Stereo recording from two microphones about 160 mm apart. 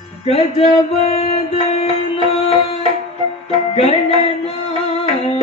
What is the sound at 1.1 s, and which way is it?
Music, 40° left (ahead or behind).